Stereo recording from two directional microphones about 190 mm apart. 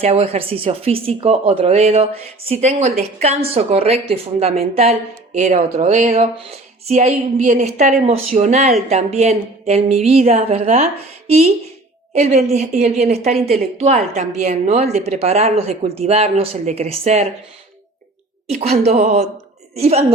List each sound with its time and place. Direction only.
0.0 s a woman's voice: 30° right (ahead or behind)
18.9 s a woman's voice: 40° right (ahead or behind)